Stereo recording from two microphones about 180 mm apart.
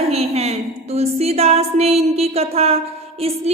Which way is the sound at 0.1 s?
35° right (ahead or behind).